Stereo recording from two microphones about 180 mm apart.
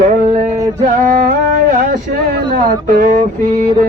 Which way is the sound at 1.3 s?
45° right (ahead or behind).